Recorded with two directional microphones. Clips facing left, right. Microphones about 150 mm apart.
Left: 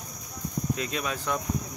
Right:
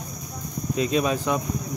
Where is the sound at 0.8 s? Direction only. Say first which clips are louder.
Right 9 dB; 20° right (ahead or behind).